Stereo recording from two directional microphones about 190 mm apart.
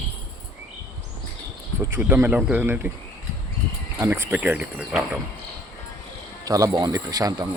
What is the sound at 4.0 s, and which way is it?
Speech, 15° right (ahead or behind).